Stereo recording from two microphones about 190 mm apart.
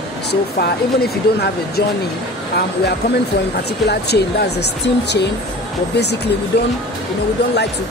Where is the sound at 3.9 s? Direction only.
60° left (ahead or behind).